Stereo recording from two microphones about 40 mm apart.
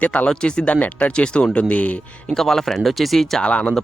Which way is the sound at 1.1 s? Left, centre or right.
Left.